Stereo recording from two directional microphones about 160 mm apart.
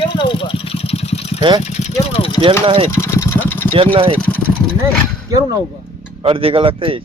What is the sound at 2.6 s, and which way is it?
Speech, 35° right (ahead or behind).